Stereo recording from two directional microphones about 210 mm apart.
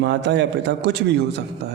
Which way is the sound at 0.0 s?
55° right (ahead or behind).